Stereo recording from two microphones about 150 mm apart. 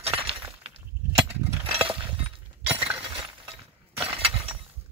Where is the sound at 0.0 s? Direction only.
40° right (ahead or behind).